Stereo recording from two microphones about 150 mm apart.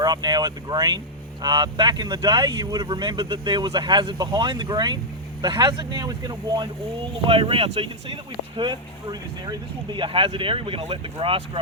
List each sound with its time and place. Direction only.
0.0 s speech: 25° right (ahead or behind)